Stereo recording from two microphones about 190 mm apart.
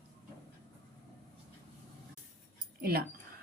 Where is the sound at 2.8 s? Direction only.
55° right (ahead or behind).